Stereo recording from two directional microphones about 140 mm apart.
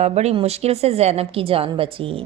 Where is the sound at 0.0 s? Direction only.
50° right (ahead or behind).